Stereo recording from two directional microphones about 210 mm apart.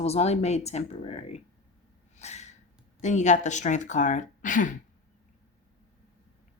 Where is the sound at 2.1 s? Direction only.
35° left (ahead or behind).